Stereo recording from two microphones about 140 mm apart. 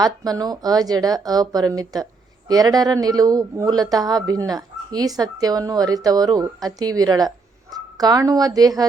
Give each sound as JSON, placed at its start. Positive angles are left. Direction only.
{"t": 0.0, "sound": "speech", "side_deg": -25}